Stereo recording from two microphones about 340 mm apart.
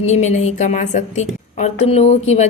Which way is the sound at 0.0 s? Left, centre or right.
Centre.